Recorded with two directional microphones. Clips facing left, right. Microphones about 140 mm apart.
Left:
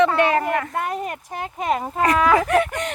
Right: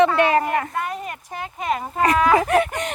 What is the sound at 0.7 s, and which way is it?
Speech, 55° left (ahead or behind).